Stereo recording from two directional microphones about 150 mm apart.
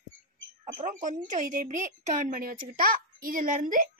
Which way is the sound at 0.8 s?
55° right (ahead or behind).